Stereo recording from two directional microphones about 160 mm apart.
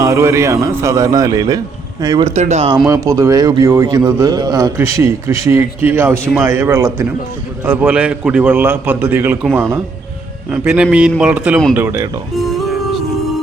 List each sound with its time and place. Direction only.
0.0 s a man's voice: 15° right (ahead or behind)
2.2 s speech: 45° right (ahead or behind)
2.8 s a man's voice: 20° right (ahead or behind)
12.5 s music: centre (ahead or behind)